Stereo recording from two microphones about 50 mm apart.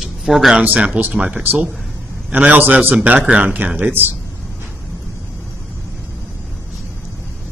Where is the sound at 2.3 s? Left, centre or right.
Right.